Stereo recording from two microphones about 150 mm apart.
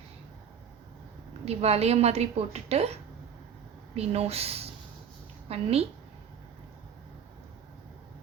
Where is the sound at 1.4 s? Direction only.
45° right (ahead or behind).